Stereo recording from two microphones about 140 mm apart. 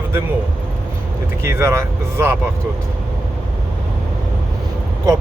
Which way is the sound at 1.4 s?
20° right (ahead or behind).